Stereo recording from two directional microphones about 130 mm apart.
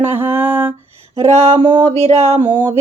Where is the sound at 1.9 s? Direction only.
50° right (ahead or behind).